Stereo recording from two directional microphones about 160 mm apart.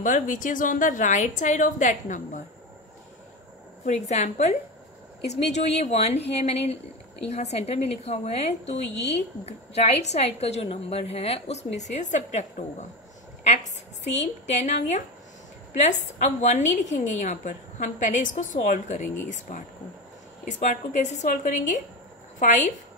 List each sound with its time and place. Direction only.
0.0 s a woman's voice: 55° left (ahead or behind)
3.8 s a woman's voice: 45° left (ahead or behind)
14.0 s a woman's voice: 45° left (ahead or behind)